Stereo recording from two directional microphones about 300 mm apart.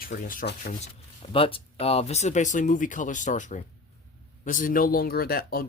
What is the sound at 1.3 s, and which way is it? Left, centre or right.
Speech, centre.